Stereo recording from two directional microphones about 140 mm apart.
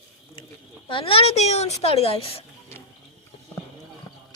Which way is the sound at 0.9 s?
40° left (ahead or behind).